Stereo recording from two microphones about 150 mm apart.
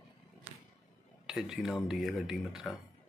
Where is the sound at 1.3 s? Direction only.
5° right (ahead or behind).